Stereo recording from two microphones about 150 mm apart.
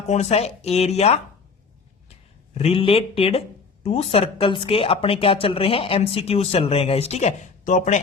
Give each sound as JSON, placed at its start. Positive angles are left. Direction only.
{"t": 0.1, "sound": "speech", "side_deg": 45}
{"t": 2.6, "sound": "a woman's voice", "side_deg": 40}